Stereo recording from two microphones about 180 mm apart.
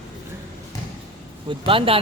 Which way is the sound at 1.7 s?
30° right (ahead or behind).